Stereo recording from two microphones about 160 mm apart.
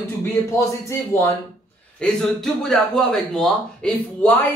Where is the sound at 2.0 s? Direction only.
5° left (ahead or behind).